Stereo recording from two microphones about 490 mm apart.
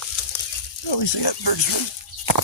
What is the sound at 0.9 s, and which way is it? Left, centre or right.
Speech, left.